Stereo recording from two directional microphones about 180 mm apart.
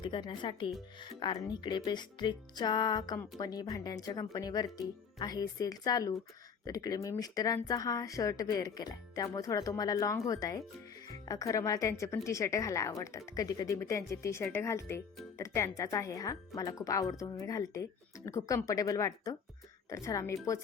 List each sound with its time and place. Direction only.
0.0 s speech: 25° left (ahead or behind)